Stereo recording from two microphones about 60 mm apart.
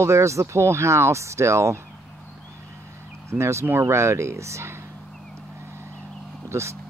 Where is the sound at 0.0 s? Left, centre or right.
Right.